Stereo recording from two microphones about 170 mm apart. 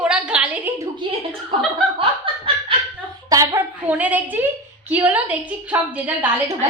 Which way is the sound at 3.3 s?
20° right (ahead or behind).